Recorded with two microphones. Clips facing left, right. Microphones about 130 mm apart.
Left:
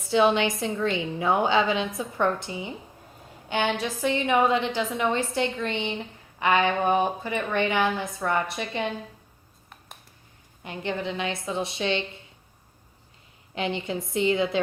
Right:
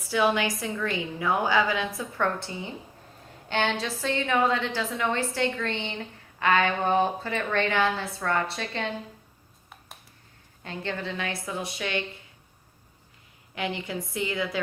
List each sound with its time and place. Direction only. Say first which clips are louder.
0.1 s a woman's voice: left 3 dB; 25° left (ahead or behind)
10.6 s a woman's voice: left 3 dB; 15° left (ahead or behind)
13.6 s a woman's voice: left 3 dB; 25° left (ahead or behind)